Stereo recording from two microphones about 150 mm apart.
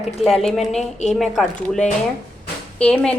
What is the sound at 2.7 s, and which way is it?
Speech, 10° left (ahead or behind).